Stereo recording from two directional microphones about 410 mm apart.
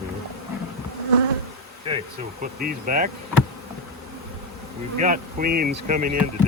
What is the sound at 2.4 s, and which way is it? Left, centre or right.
Speech, centre.